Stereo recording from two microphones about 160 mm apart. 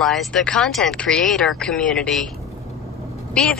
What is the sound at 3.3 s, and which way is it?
Speech, 5° left (ahead or behind).